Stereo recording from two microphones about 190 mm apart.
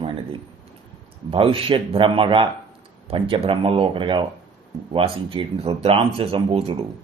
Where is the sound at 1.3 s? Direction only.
30° right (ahead or behind).